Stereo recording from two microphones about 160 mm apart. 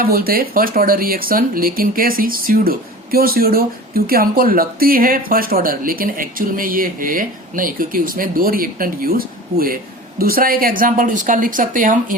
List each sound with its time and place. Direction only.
0.0 s speech: 70° right (ahead or behind)